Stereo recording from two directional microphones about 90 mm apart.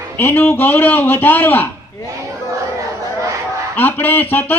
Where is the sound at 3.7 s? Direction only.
20° left (ahead or behind).